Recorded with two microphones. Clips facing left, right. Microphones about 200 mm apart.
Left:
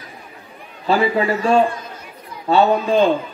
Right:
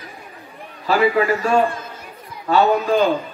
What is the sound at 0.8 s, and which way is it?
A man's voice, 25° left (ahead or behind).